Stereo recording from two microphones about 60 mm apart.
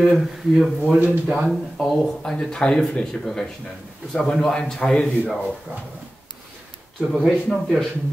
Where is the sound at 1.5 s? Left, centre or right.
Centre.